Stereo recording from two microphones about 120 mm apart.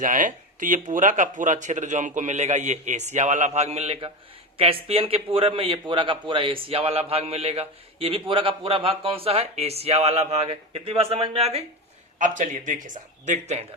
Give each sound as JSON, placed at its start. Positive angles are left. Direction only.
{"t": 0.0, "sound": "a man's voice", "side_deg": -90}
{"t": 12.2, "sound": "speech", "side_deg": -90}